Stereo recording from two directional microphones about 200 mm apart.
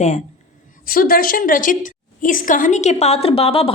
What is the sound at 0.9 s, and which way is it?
A woman's voice, 45° left (ahead or behind).